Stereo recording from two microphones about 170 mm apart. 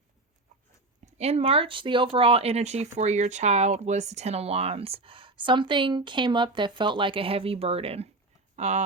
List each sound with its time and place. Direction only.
1.0 s speech: 40° right (ahead or behind)